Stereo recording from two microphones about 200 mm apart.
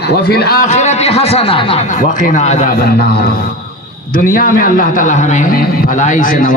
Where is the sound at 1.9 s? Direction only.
40° left (ahead or behind).